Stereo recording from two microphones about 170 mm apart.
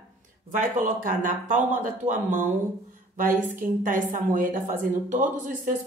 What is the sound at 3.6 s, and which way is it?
Speech, 50° right (ahead or behind).